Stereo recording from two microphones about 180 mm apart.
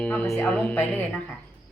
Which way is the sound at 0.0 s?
10° left (ahead or behind).